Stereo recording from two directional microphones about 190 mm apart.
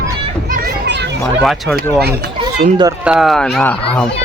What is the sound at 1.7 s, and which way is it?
Speech, 55° right (ahead or behind).